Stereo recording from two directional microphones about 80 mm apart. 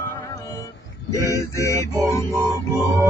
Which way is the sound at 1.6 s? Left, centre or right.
Left.